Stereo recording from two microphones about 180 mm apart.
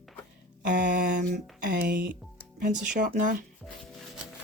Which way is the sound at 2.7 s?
45° right (ahead or behind).